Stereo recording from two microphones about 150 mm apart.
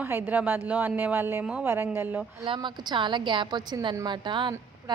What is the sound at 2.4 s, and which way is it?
A woman's voice, 30° right (ahead or behind).